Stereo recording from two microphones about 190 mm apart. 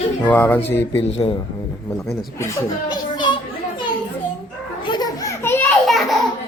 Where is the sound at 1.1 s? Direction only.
30° left (ahead or behind).